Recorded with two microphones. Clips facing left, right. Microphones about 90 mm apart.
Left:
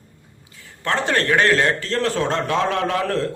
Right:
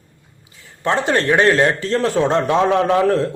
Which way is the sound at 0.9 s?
20° right (ahead or behind).